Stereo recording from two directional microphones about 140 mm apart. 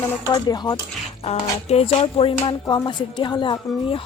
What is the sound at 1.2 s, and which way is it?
Speech, 45° left (ahead or behind).